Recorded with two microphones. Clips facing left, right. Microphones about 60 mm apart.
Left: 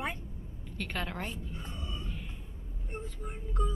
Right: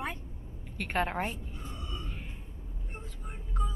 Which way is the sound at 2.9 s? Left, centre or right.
Centre.